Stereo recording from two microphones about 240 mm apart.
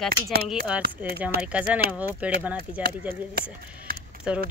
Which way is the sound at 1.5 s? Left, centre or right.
Centre.